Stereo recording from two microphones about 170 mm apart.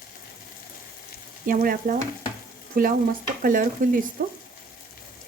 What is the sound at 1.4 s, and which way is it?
Frying, 55° right (ahead or behind).